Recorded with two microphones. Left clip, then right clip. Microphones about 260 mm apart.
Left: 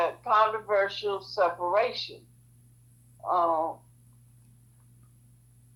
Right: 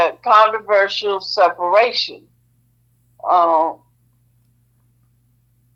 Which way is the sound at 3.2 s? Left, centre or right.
Right.